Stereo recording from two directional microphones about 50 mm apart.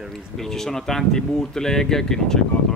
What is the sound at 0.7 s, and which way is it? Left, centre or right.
Speech, centre.